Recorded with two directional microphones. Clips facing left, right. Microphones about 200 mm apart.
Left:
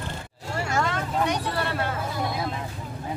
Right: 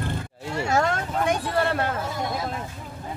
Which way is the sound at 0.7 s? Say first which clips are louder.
Right 2 dB; 50° right (ahead or behind).